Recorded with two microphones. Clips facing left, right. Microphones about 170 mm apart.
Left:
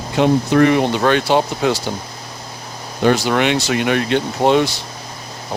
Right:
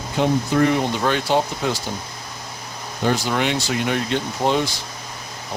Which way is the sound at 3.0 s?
75° left (ahead or behind).